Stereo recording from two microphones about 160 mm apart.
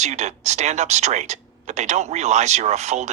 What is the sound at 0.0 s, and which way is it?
Speech, 45° right (ahead or behind).